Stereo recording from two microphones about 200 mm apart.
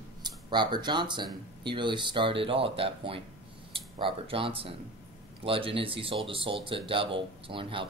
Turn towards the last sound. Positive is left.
turn(degrees=-25)  # may be behind; listen again after turning